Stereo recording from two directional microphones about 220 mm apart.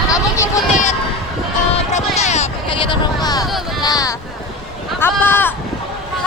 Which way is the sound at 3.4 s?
Centre (ahead or behind).